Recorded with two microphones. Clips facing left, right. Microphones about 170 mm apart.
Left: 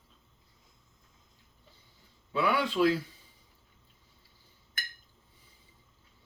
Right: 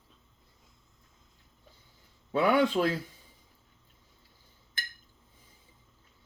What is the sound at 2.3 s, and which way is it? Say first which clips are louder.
Speech: right 5 dB; 45° right (ahead or behind).